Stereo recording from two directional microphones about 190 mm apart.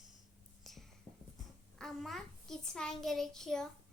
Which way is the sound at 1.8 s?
Centre (ahead or behind).